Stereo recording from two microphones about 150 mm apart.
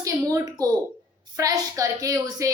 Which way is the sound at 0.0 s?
20° right (ahead or behind).